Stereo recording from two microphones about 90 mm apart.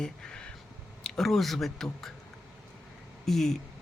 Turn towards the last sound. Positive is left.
turn(degrees=5)  # may be behind; listen again after turning